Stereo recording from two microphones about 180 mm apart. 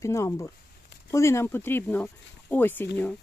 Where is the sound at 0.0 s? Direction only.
15° left (ahead or behind).